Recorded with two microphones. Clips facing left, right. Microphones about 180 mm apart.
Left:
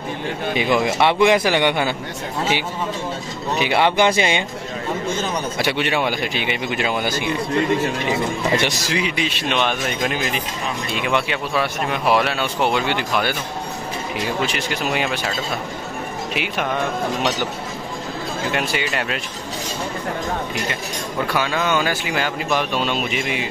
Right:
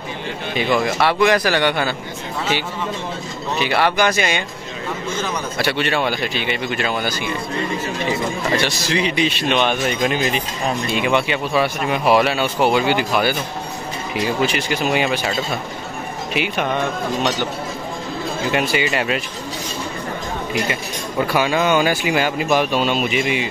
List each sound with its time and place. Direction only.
0.6 s speech: 15° left (ahead or behind)
3.5 s speech: 15° left (ahead or behind)
8.5 s speech: 15° left (ahead or behind)
8.9 s speech: 5° left (ahead or behind)
14.4 s speech: centre (ahead or behind)
16.3 s speech: centre (ahead or behind)
18.5 s speech: 5° right (ahead or behind)
21.3 s speech: 10° right (ahead or behind)